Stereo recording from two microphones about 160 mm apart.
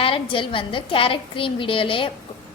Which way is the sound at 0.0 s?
35° left (ahead or behind).